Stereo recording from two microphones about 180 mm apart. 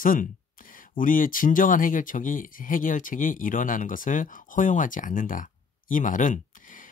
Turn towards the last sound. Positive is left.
turn(degrees=50)  # may be behind; listen again after turning